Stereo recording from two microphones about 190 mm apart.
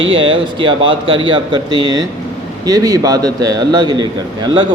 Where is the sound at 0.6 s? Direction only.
25° right (ahead or behind).